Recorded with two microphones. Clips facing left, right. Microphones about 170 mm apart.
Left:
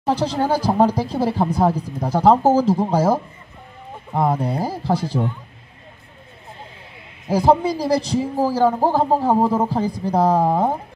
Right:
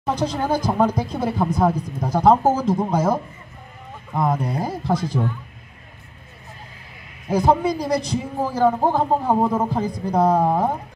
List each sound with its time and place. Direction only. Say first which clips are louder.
0.0 s a man's voice: left 3 dB; 30° left (ahead or behind)
7.2 s a man's voice: left 2 dB; 30° left (ahead or behind)